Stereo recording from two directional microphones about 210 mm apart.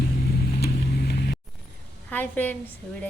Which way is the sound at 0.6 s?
50° left (ahead or behind).